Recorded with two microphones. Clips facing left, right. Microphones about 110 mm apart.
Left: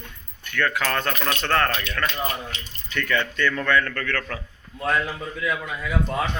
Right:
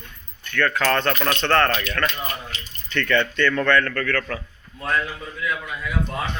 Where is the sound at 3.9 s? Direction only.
25° left (ahead or behind).